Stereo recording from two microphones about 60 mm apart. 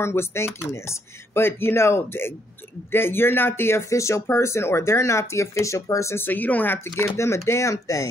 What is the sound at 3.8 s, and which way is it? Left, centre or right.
Speech, left.